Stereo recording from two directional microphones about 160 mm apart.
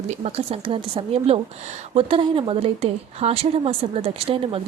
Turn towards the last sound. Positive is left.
turn(degrees=-35)  # may be behind; listen again after turning